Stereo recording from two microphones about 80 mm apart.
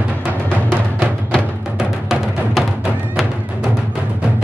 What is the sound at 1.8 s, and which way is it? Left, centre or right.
Music, centre.